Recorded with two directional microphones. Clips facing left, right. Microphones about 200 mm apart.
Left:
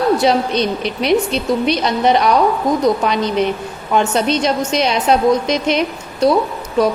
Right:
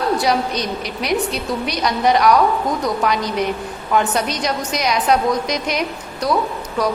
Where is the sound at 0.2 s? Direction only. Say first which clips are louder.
Left 4 dB; 25° left (ahead or behind).